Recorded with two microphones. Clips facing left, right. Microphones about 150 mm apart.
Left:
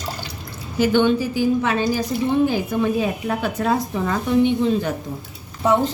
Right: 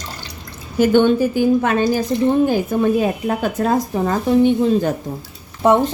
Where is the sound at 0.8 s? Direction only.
50° right (ahead or behind).